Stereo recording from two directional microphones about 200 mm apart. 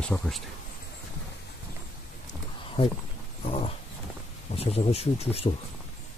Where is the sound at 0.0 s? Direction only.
5° left (ahead or behind).